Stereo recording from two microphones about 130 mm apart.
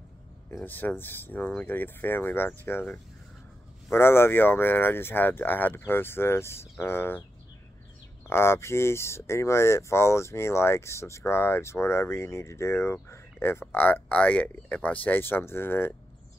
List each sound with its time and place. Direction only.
0.7 s speech: 15° left (ahead or behind)
8.3 s speech: 20° left (ahead or behind)